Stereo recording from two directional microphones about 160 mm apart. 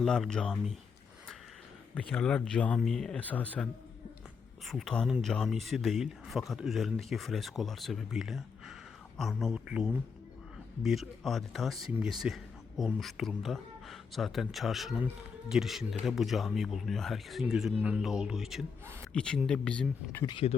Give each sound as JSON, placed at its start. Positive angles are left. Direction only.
{"t": 0.0, "sound": "speech", "side_deg": 0}
{"t": 2.0, "sound": "speech", "side_deg": 5}
{"t": 20.2, "sound": "speech", "side_deg": 35}